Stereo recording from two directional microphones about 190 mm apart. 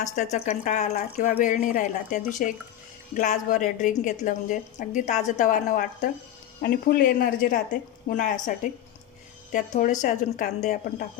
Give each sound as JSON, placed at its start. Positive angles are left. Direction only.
{"t": 0.0, "sound": "a woman's voice", "side_deg": 40}
{"t": 9.7, "sound": "a woman's voice", "side_deg": 40}